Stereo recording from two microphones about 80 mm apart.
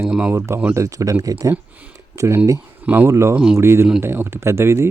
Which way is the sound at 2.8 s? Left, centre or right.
Right.